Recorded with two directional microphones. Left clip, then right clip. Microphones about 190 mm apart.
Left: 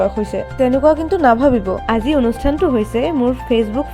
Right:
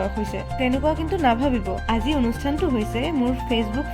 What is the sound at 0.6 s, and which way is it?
Speech, 25° left (ahead or behind).